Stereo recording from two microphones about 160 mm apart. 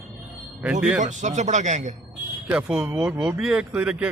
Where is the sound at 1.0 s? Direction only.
50° right (ahead or behind).